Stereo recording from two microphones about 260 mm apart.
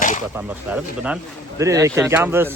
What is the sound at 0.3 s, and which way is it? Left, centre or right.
Speech, centre.